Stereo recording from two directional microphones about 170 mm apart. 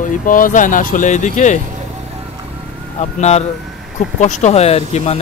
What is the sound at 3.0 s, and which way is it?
Speech, 40° left (ahead or behind).